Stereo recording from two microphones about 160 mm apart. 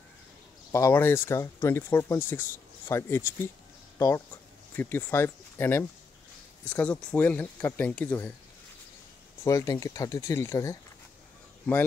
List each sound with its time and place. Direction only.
0.7 s speech: 20° left (ahead or behind)
4.7 s speech: 15° left (ahead or behind)
9.4 s speech: 20° left (ahead or behind)